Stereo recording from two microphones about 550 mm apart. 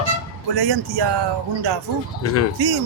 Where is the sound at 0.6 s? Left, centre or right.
Right.